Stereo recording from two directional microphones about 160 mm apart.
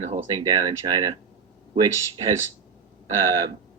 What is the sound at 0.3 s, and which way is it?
Speech, 25° right (ahead or behind).